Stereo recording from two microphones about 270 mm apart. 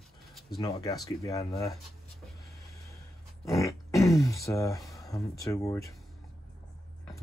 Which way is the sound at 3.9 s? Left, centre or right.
Centre.